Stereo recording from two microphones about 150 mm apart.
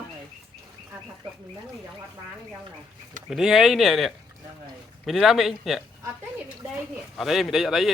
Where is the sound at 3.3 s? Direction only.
5° right (ahead or behind).